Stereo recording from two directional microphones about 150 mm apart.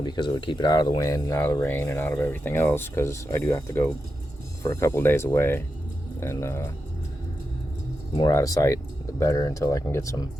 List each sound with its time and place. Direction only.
0.0 s speech: 30° left (ahead or behind)
8.2 s speech: 20° left (ahead or behind)